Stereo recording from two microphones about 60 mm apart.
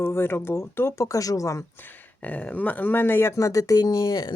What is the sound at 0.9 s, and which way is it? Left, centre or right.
Speech, left.